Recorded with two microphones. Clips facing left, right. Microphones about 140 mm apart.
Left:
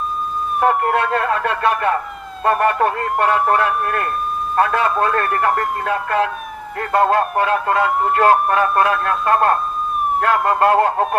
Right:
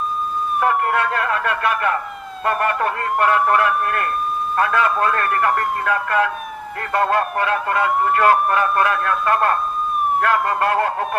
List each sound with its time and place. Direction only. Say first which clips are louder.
0.6 s speech: left 3 dB; 30° left (ahead or behind)